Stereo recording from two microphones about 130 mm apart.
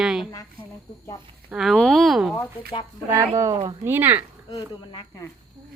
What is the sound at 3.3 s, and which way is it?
Speech, 25° right (ahead or behind).